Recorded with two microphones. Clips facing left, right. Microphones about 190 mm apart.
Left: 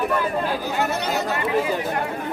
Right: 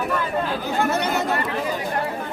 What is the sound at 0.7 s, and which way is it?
Speech, 50° right (ahead or behind).